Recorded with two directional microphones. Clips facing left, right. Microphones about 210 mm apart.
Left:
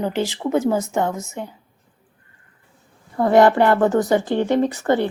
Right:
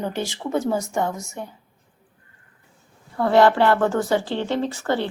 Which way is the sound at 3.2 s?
20° left (ahead or behind).